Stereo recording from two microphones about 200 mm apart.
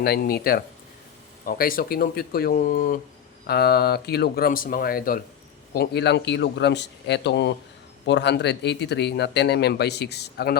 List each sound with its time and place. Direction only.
0.0 s speech: 50° left (ahead or behind)